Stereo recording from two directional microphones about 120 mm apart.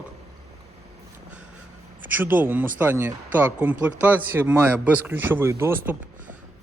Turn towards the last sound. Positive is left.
turn(degrees=-20)  # may be behind; listen again after turning